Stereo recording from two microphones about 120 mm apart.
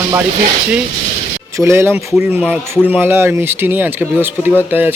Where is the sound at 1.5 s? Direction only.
25° right (ahead or behind).